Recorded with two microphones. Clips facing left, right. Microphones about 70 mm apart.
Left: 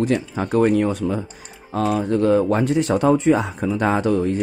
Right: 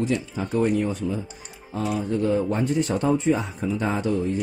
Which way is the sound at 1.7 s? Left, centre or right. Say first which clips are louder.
Left 6 dB; left.